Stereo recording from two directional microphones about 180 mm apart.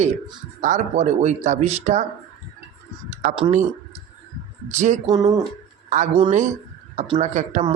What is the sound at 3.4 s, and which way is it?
Speech, 40° right (ahead or behind).